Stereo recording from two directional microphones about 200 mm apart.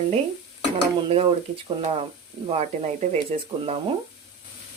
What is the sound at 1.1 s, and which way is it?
Speech, 30° right (ahead or behind).